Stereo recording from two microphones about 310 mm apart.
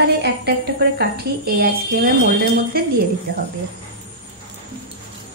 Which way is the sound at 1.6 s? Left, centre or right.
Right.